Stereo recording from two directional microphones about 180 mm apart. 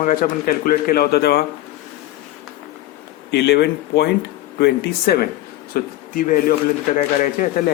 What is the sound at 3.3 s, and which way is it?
Speech, 70° left (ahead or behind).